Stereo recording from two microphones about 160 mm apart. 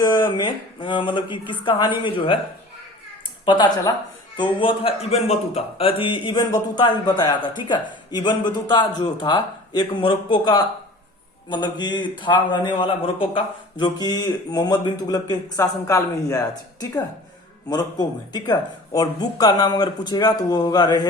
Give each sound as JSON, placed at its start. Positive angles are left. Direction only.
{"t": 0.0, "sound": "a man's voice", "side_deg": 25}
{"t": 3.4, "sound": "a man's voice", "side_deg": 30}